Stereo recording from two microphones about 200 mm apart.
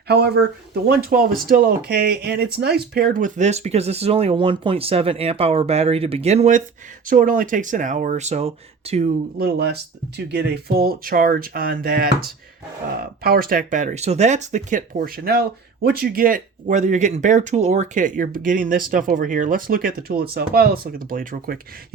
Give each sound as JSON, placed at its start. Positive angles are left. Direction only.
{"t": 0.1, "sound": "speech", "side_deg": -55}
{"t": 9.4, "sound": "speech", "side_deg": -50}